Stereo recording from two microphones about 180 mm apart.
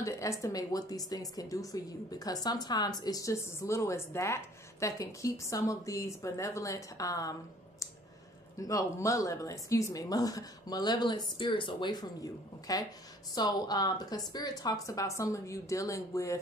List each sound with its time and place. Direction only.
0.0 s a woman's voice: 15° left (ahead or behind)
8.5 s a woman's voice: 20° left (ahead or behind)